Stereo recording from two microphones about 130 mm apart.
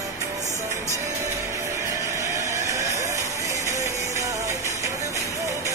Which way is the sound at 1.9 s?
25° right (ahead or behind).